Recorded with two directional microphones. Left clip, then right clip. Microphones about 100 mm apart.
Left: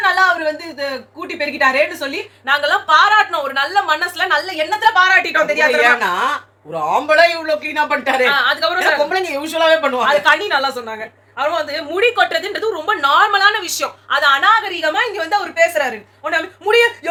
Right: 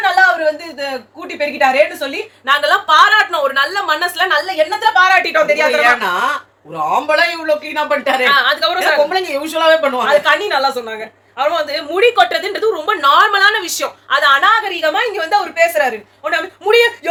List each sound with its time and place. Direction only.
0.0 s a sound: 10° right (ahead or behind)
1.4 s a woman's voice: 10° right (ahead or behind)
2.6 s a woman's voice: 20° right (ahead or behind)
5.8 s a man's voice: 35° left (ahead or behind)
8.3 s a woman's voice: 25° right (ahead or behind)
9.0 s a man's voice: 35° left (ahead or behind)
10.1 s a woman's voice: 20° right (ahead or behind)